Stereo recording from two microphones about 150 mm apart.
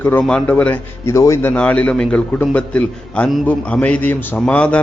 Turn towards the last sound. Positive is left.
turn(degrees=10)  # may be behind; listen again after turning